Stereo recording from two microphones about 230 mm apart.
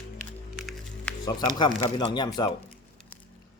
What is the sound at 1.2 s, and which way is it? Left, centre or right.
Speech, centre.